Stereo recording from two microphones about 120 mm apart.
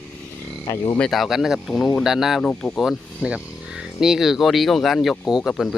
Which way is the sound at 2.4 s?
5° left (ahead or behind).